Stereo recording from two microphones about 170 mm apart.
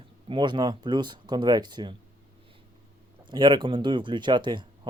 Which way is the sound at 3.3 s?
25° right (ahead or behind).